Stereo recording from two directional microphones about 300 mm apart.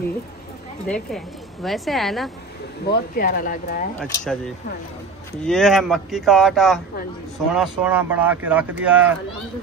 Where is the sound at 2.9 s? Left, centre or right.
Left.